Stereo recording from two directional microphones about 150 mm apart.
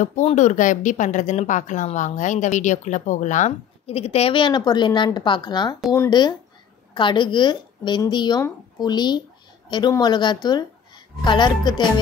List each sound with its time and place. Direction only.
0.0 s a woman's voice: 50° left (ahead or behind); by 11.8 s 30° left (ahead or behind)